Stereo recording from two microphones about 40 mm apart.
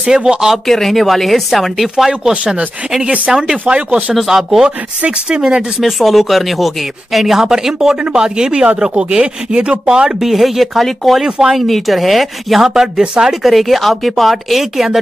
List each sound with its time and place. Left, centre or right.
0.0 s speech: right
0.7 s speech: centre
2.4 s speech: right
3.3 s speech: centre
3.6 s speech: right
4.3 s speech: centre
5.3 s speech: right
5.8 s speech: centre; by 10.1 s right
10.2 s speech: centre
11.2 s speech: right
11.6 s speech: centre
13.0 s speech: right
13.3 s speech: centre